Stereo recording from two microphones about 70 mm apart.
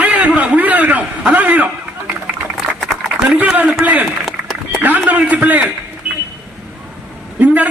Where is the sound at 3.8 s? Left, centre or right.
Right.